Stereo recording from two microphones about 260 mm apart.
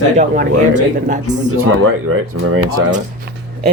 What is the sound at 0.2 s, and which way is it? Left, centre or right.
Speech, right.